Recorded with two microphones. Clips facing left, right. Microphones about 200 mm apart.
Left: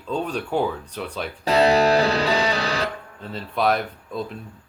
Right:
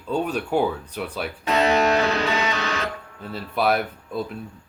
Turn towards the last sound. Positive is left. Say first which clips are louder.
# right 1 dB
turn(degrees=-5)  # may be behind; listen again after turning